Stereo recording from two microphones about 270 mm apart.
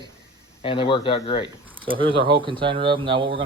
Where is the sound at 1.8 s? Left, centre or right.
Centre.